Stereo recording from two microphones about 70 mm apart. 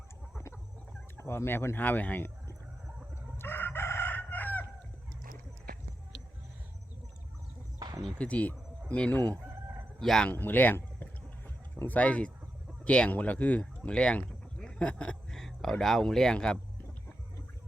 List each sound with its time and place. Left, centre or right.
1.1 s speech: left
3.3 s chicken: left
8.2 s chicken: centre
10.0 s speech: centre
10.2 s a sound: left
12.8 s speech: centre